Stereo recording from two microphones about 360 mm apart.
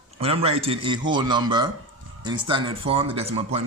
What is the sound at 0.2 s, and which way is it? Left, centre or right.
Speech, centre.